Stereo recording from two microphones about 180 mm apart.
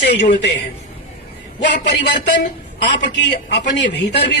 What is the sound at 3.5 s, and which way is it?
Speech, 75° left (ahead or behind).